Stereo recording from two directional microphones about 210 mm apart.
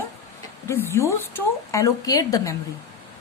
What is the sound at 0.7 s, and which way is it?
Speech, 10° left (ahead or behind).